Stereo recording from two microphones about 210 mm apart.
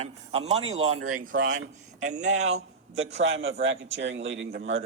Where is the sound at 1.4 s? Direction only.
60° right (ahead or behind).